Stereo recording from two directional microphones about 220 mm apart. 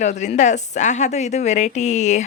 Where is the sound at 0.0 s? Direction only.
35° left (ahead or behind).